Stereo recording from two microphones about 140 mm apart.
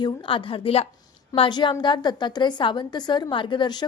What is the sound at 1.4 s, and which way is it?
A woman's voice, 35° left (ahead or behind).